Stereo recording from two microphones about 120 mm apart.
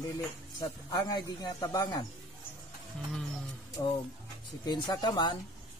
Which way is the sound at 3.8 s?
25° left (ahead or behind).